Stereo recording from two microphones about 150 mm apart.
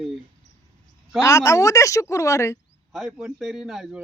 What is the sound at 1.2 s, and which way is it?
A man's voice, 20° left (ahead or behind).